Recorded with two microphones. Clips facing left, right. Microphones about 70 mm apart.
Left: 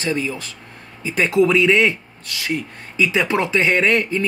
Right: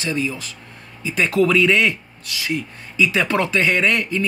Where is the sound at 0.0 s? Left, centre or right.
Left.